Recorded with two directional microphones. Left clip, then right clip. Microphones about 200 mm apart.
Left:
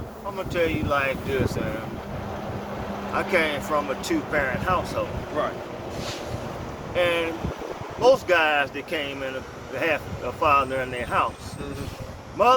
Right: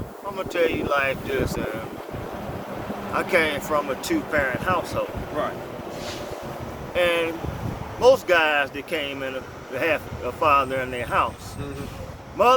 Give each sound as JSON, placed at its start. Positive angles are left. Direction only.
{"t": 0.3, "sound": "speech", "side_deg": -30}
{"t": 3.2, "sound": "speech", "side_deg": -30}
{"t": 6.9, "sound": "speech", "side_deg": -30}
{"t": 12.4, "sound": "speech", "side_deg": -25}